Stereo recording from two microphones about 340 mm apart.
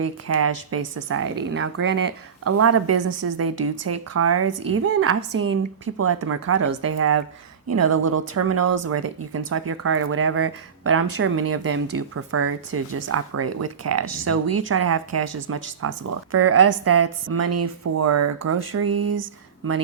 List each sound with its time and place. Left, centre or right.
0.0 s a woman's voice: right